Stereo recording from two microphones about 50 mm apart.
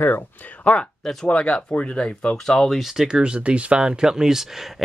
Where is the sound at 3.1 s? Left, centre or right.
Right; by 4.8 s centre.